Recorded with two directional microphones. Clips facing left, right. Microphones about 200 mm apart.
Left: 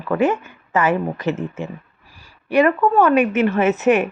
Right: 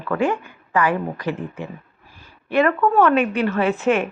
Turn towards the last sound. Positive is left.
turn(degrees=20)  # may be behind; listen again after turning